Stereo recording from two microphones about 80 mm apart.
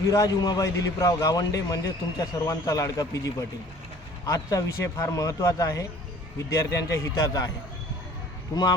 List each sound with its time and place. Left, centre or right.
0.1 s a man's voice: left
7.2 s a man's voice: left
8.5 s speech: left